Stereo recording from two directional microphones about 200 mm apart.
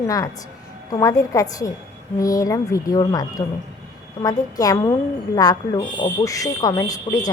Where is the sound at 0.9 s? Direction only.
20° left (ahead or behind).